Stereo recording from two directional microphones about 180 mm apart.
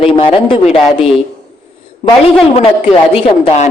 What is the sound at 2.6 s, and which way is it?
Speech, 35° left (ahead or behind).